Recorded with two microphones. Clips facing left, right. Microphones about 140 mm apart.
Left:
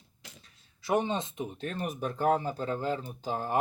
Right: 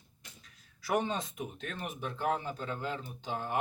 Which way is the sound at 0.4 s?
20° left (ahead or behind).